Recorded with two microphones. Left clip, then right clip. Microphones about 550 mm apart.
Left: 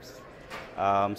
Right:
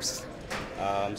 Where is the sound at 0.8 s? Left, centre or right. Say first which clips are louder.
Left 5 dB; left.